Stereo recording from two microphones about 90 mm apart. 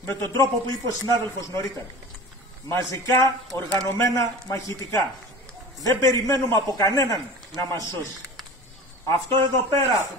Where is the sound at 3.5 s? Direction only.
25° left (ahead or behind).